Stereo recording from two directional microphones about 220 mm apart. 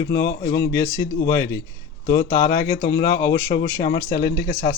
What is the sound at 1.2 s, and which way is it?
Speech, 15° left (ahead or behind).